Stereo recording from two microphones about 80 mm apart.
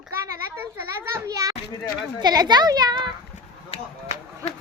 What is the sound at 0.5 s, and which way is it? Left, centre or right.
A child's voice, right.